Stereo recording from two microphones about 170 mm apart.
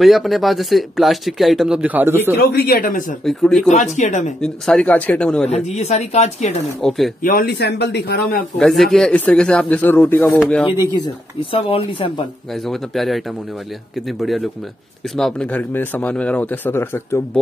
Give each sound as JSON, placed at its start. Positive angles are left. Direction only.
{"t": 0.0, "sound": "speech", "side_deg": 0}
{"t": 2.5, "sound": "speech", "side_deg": 65}
{"t": 3.3, "sound": "speech", "side_deg": 0}
{"t": 3.7, "sound": "speech", "side_deg": 45}
{"t": 4.4, "sound": "speech", "side_deg": 5}
{"t": 5.5, "sound": "speech", "side_deg": 40}
{"t": 6.8, "sound": "speech", "side_deg": 0}
{"t": 7.2, "sound": "speech", "side_deg": 55}
{"t": 8.5, "sound": "speech", "side_deg": 0}
{"t": 11.5, "sound": "speech", "side_deg": 35}
{"t": 12.6, "sound": "speech", "side_deg": 0}